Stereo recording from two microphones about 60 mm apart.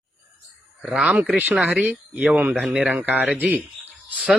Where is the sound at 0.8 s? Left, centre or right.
Centre.